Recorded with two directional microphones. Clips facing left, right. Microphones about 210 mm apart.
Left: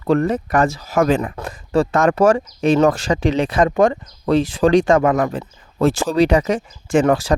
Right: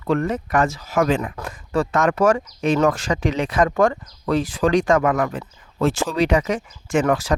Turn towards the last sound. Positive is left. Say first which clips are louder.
# left 4 dB
turn(degrees=30)  # may be behind; listen again after turning